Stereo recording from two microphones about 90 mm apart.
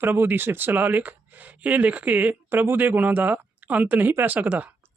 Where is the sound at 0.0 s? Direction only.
20° right (ahead or behind).